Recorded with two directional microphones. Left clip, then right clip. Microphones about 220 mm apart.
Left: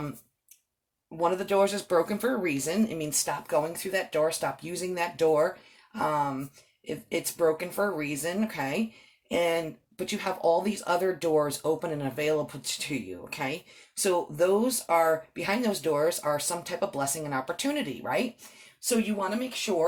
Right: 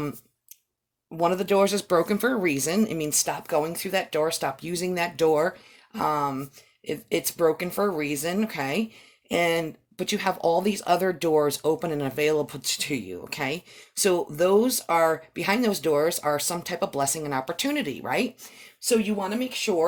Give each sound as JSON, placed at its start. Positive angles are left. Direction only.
{"t": 1.2, "sound": "speech", "side_deg": -45}